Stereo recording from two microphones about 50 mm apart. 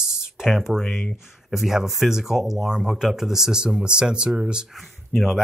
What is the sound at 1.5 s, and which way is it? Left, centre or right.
Speech, centre.